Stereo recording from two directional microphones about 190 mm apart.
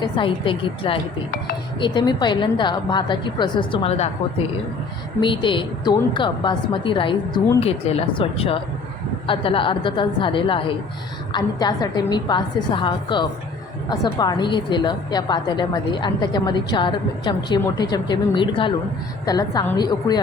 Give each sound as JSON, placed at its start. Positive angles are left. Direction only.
{"t": 0.0, "sound": "a woman's voice", "side_deg": 25}
{"t": 5.2, "sound": "a woman's voice", "side_deg": 25}